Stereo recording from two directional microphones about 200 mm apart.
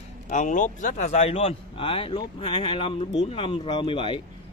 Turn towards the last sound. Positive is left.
turn(degrees=25)  # may be behind; listen again after turning